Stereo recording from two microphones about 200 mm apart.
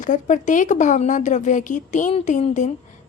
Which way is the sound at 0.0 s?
40° left (ahead or behind).